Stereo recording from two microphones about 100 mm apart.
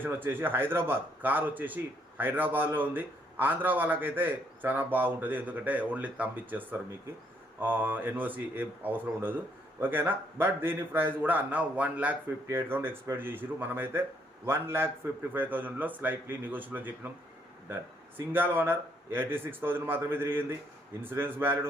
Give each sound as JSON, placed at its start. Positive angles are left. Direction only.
{"t": 0.0, "sound": "a man's voice", "side_deg": -20}
{"t": 18.3, "sound": "a man's voice", "side_deg": -20}